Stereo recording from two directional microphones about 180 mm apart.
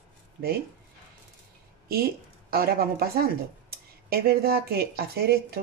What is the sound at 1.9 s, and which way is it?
Speech, 55° right (ahead or behind).